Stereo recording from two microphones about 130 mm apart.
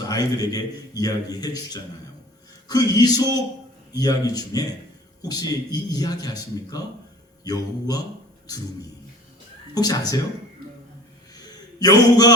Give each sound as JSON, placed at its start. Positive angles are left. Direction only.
{"t": 0.0, "sound": "a man's voice", "side_deg": 30}
{"t": 11.8, "sound": "a man's voice", "side_deg": 30}